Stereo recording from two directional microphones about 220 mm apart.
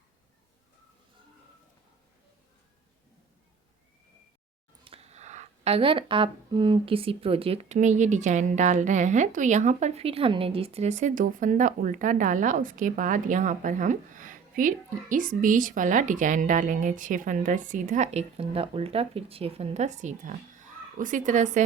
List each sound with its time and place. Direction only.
4.9 s speech: 30° right (ahead or behind)